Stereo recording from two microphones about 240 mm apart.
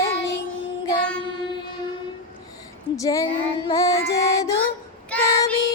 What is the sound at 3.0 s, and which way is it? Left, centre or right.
Female singing, centre.